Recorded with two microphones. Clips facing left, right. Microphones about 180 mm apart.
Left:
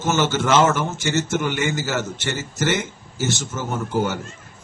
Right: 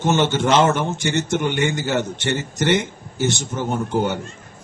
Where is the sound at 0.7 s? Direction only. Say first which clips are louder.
Right 1 dB; 15° right (ahead or behind).